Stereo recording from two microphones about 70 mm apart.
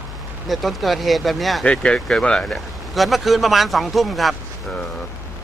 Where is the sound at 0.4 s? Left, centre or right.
Centre.